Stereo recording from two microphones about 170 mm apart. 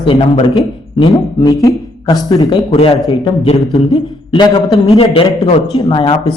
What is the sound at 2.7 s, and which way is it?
A man's voice, 35° left (ahead or behind).